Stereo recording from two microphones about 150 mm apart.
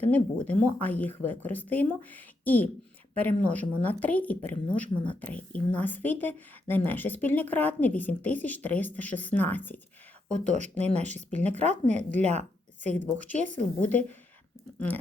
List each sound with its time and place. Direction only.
0.0 s a woman's voice: 10° left (ahead or behind)
10.4 s a woman's voice: 50° right (ahead or behind)
13.6 s a woman's voice: 10° left (ahead or behind)